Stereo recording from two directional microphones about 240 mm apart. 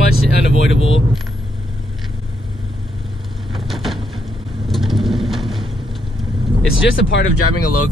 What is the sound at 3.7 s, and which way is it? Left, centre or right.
Vehicle, centre.